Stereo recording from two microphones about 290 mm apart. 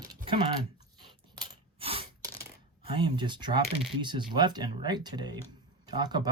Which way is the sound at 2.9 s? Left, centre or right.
Centre.